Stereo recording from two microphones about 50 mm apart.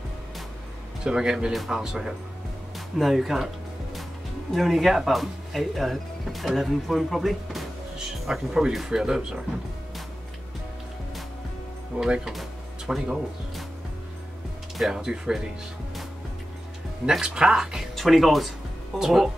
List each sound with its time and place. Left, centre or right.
1.0 s speech: centre
1.5 s speech: centre
1.8 s speech: centre
4.5 s speech: centre
11.9 s speech: right
12.3 s music: centre
14.9 s speech: centre
17.3 s speech: centre
17.9 s speech: centre